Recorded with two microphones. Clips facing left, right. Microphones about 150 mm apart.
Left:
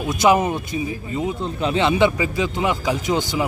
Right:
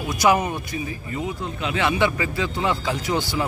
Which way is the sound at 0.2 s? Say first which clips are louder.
Left 3 dB; 20° left (ahead or behind).